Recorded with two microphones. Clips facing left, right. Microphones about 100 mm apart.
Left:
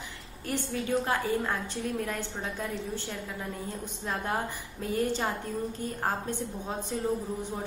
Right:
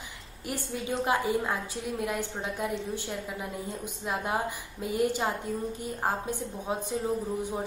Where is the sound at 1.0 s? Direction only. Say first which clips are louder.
Right 2 dB; 15° right (ahead or behind).